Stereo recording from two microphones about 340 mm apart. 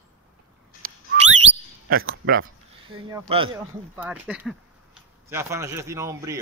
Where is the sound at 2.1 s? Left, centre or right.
Right.